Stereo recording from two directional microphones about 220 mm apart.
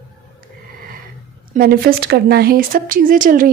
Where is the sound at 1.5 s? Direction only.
40° right (ahead or behind).